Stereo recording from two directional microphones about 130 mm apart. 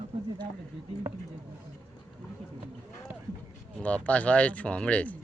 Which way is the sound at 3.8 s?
10° left (ahead or behind).